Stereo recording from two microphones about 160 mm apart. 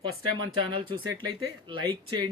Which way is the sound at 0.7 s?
30° right (ahead or behind).